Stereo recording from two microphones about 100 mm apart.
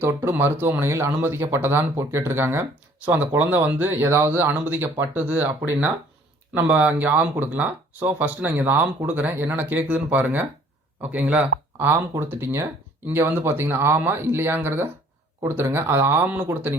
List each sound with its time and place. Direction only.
0.0 s speech: 25° right (ahead or behind)
11.9 s speech: 25° right (ahead or behind)